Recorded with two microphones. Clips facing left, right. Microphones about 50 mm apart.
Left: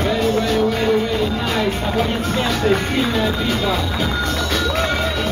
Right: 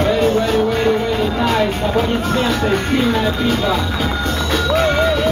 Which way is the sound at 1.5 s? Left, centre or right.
Centre.